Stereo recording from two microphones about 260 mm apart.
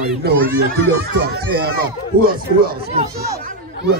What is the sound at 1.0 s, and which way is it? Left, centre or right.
Speech, right.